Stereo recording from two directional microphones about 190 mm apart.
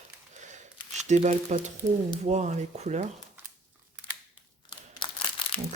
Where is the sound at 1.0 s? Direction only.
40° right (ahead or behind).